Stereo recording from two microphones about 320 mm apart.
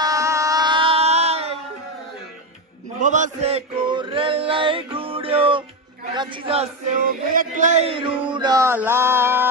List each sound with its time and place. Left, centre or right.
0.0 s a sound: centre
3.0 s chant: right
6.1 s a man's voice: centre